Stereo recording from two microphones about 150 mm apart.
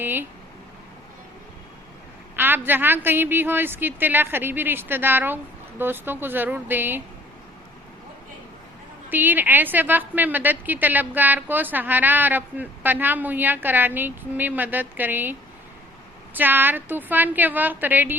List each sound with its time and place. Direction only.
0.0 s a woman's voice: 15° right (ahead or behind)
2.3 s a woman's voice: 15° right (ahead or behind)
9.0 s a woman's voice: 10° right (ahead or behind)